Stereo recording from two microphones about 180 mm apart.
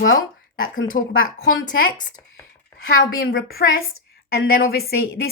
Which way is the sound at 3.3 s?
65° left (ahead or behind).